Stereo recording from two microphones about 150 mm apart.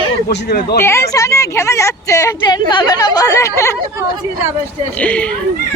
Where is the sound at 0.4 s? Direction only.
90° left.